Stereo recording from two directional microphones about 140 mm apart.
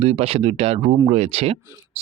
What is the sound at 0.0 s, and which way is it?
Speech, 45° right (ahead or behind).